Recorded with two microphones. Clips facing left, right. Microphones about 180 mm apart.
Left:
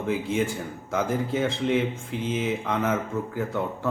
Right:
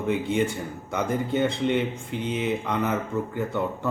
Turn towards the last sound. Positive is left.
turn(degrees=0)  # may be behind; listen again after turning